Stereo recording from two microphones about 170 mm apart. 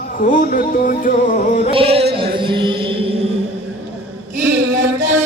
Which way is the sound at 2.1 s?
30° right (ahead or behind).